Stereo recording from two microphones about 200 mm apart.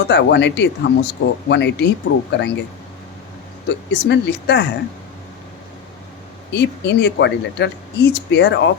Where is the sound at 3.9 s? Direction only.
60° left (ahead or behind).